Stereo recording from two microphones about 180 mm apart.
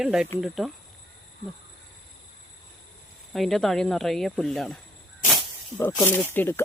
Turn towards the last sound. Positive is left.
turn(degrees=10)  # may be behind; listen again after turning